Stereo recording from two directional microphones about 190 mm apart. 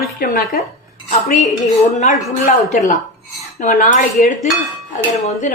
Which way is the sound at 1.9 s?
40° left (ahead or behind).